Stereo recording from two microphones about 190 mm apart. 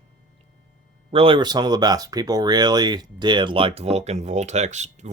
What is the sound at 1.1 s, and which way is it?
Speech, 30° right (ahead or behind).